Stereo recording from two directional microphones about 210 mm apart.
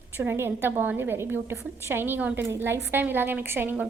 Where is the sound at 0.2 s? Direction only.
10° right (ahead or behind).